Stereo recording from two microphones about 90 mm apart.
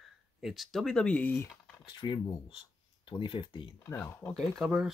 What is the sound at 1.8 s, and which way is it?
Speech, 60° left (ahead or behind).